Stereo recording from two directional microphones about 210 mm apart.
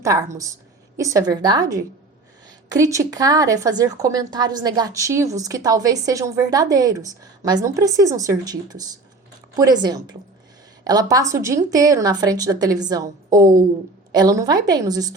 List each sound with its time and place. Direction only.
0.0 s a woman's voice: 15° right (ahead or behind)
2.6 s a woman's voice: 15° right (ahead or behind)